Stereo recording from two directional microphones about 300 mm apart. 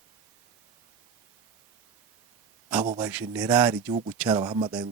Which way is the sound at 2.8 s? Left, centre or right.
Centre.